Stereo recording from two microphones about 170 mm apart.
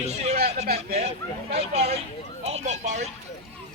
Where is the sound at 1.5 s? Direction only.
35° right (ahead or behind).